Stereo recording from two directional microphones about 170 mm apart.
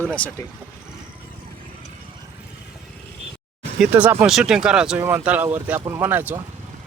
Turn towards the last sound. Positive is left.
turn(degrees=-10)  # may be behind; listen again after turning